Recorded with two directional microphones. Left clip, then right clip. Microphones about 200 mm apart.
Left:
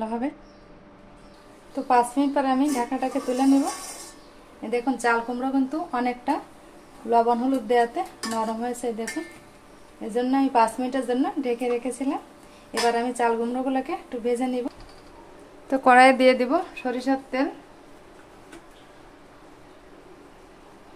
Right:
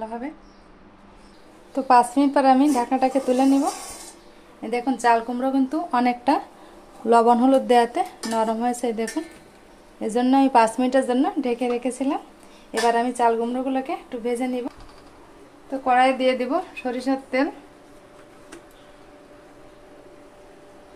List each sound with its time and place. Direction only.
0.0 s speech: 30° left (ahead or behind)
1.9 s a woman's voice: 30° right (ahead or behind)
4.6 s a woman's voice: 15° right (ahead or behind)
7.1 s a woman's voice: 40° right (ahead or behind); by 14.7 s 5° right (ahead or behind)
15.7 s speech: 30° left (ahead or behind); by 17.5 s 5° right (ahead or behind)